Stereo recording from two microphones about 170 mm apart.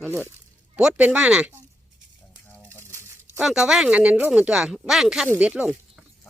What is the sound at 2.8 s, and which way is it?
Crumpling, 15° right (ahead or behind).